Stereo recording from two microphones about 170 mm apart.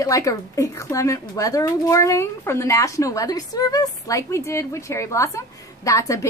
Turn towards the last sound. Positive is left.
turn(degrees=20)  # may be behind; listen again after turning